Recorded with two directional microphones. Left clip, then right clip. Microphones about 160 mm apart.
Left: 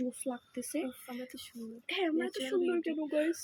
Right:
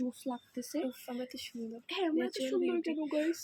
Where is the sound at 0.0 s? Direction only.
5° left (ahead or behind).